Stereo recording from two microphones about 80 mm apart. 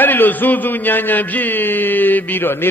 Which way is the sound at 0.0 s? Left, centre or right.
Left.